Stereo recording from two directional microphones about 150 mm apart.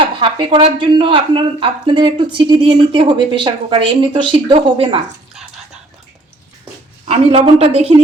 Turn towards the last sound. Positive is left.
turn(degrees=-40)  # may be behind; listen again after turning